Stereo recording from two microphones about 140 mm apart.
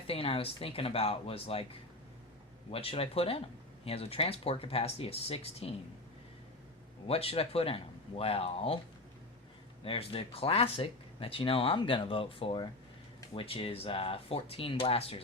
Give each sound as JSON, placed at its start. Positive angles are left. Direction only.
{"t": 0.1, "sound": "speech", "side_deg": 40}
{"t": 2.6, "sound": "speech", "side_deg": 45}
{"t": 7.1, "sound": "speech", "side_deg": 45}
{"t": 9.8, "sound": "speech", "side_deg": 40}